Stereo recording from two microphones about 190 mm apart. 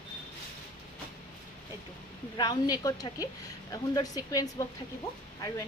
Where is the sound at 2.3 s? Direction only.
20° left (ahead or behind).